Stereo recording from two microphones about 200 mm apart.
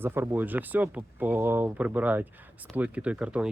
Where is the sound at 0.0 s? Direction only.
10° right (ahead or behind).